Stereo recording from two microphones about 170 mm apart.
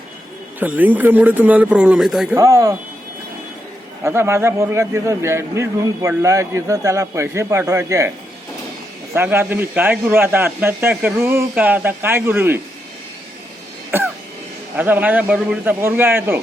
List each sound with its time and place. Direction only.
0.6 s a man's voice: 10° right (ahead or behind)
2.4 s speech: 20° right (ahead or behind)
4.0 s a man's voice: 15° right (ahead or behind)
9.1 s a man's voice: 15° right (ahead or behind)
13.9 s throat clearing: 15° right (ahead or behind)
14.8 s a man's voice: 10° right (ahead or behind)